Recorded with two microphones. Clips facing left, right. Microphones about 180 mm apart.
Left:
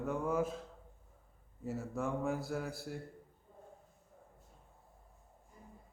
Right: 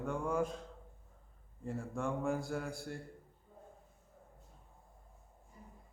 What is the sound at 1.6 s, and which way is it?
A man's voice, 5° left (ahead or behind).